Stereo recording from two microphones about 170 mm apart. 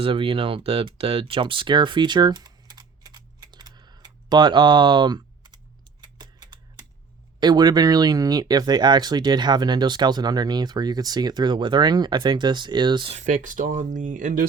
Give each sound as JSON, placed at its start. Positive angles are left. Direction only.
{"t": 0.0, "sound": "speech", "side_deg": -30}
{"t": 6.1, "sound": "a sound", "side_deg": -25}
{"t": 7.3, "sound": "speech", "side_deg": -25}
{"t": 13.1, "sound": "speech", "side_deg": -45}